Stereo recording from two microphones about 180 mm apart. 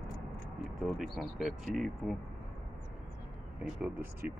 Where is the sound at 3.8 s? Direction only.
5° right (ahead or behind).